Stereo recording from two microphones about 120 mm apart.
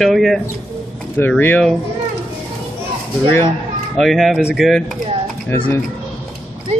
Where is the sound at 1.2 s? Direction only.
15° left (ahead or behind).